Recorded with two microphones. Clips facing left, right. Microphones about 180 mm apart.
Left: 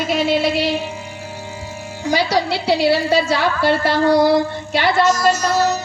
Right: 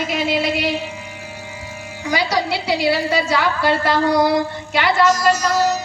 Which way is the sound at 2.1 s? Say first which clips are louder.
Left 2 dB; 30° left (ahead or behind).